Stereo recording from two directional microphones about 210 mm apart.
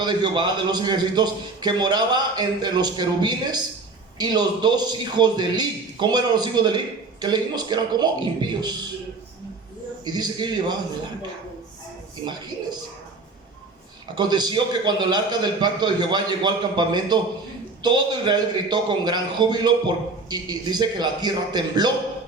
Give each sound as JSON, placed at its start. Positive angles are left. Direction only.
{"t": 0.0, "sound": "a man's voice", "side_deg": -20}
{"t": 10.0, "sound": "a man's voice", "side_deg": -20}
{"t": 14.2, "sound": "a man's voice", "side_deg": -20}